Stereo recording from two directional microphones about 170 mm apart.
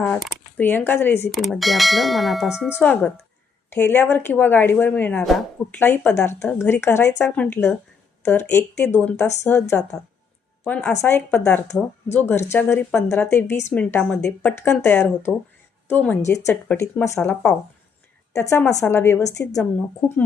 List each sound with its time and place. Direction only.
0.0 s a sound: 5° left (ahead or behind)
0.6 s a woman's voice: 10° left (ahead or behind)
1.4 s bell: centre (ahead or behind)
2.8 s bell: 5° left (ahead or behind)
3.8 s a woman's voice: 10° left (ahead or behind)
7.3 s bell: 5° left (ahead or behind)
8.2 s a woman's voice: 10° left (ahead or behind)
17.2 s bell: 5° left (ahead or behind)
18.3 s a woman's voice: 15° left (ahead or behind)